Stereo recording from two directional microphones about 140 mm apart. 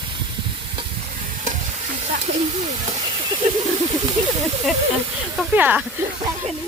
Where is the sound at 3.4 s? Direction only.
55° right (ahead or behind).